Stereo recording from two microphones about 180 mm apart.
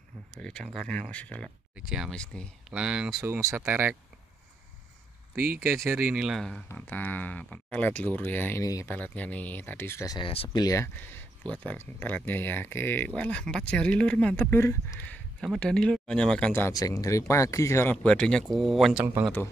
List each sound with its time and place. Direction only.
0.3 s speech: 5° left (ahead or behind)
1.8 s speech: 5° right (ahead or behind)
3.3 s speech: 15° right (ahead or behind)
5.9 s speech: 10° right (ahead or behind); by 10.6 s 30° left (ahead or behind)
10.6 s speech: 15° left (ahead or behind)
18.0 s speech: 5° left (ahead or behind)